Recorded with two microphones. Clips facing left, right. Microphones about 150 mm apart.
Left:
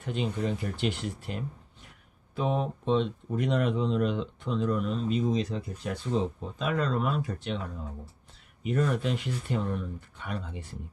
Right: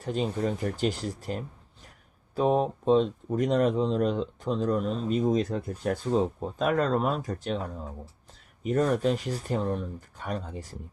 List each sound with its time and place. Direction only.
0.0 s speech: 40° right (ahead or behind)